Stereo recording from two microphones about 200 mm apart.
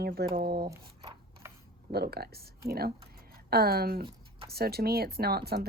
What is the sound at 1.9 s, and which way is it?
A woman's voice, 50° right (ahead or behind).